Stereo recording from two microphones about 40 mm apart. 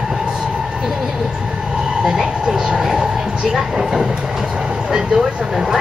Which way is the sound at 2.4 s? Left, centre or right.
Right.